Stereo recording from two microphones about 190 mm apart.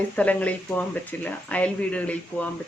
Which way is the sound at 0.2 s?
10° left (ahead or behind).